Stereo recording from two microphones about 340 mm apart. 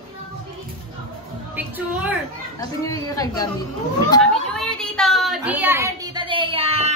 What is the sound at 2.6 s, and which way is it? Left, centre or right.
Speech, centre.